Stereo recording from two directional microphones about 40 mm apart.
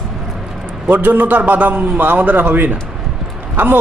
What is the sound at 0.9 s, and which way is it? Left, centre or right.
A man's voice, right.